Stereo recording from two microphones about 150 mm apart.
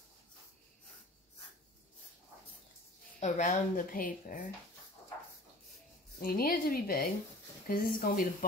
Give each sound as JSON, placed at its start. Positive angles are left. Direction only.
{"t": 3.2, "sound": "speech", "side_deg": 55}
{"t": 6.1, "sound": "a woman's voice", "side_deg": 85}